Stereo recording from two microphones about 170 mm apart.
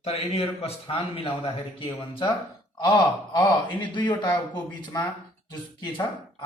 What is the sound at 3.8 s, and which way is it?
A man's voice, 30° left (ahead or behind).